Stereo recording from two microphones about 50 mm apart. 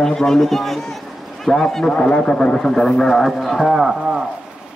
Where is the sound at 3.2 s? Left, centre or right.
Centre.